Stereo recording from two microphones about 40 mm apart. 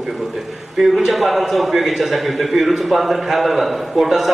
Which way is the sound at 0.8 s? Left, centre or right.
Centre.